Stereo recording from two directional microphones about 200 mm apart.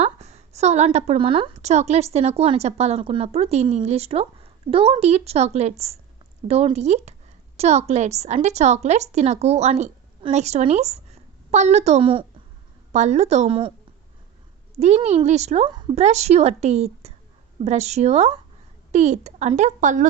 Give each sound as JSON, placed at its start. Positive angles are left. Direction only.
{"t": 0.0, "sound": "a woman's voice", "side_deg": -35}
{"t": 14.8, "sound": "a woman's voice", "side_deg": -35}